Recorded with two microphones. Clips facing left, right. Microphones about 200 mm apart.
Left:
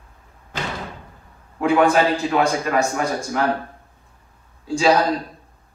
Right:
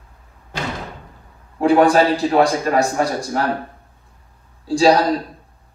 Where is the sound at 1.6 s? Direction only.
35° right (ahead or behind).